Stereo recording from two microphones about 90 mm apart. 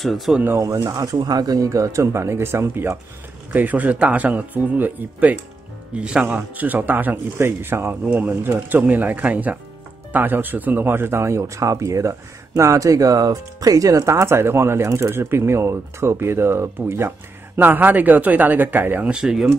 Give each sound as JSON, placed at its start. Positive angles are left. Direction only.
{"t": 0.0, "sound": "speech", "side_deg": 0}
{"t": 0.6, "sound": "a man's voice", "side_deg": -35}